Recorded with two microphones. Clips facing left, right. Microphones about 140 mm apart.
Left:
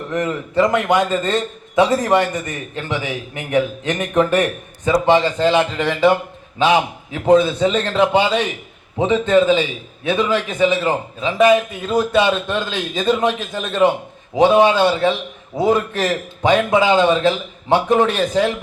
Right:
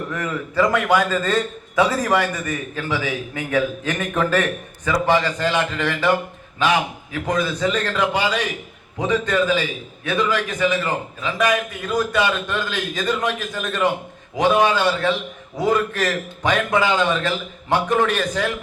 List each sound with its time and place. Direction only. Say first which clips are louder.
0.1 s a man's voice: left 5 dB; 20° left (ahead or behind)